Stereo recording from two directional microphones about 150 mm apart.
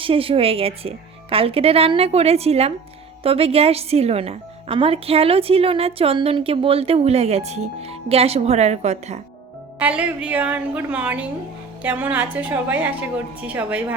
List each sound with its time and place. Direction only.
0.0 s speech: 35° right (ahead or behind)
9.7 s a woman's voice: 10° right (ahead or behind)